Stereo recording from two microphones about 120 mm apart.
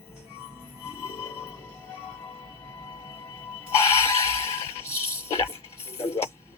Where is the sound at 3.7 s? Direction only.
20° left (ahead or behind).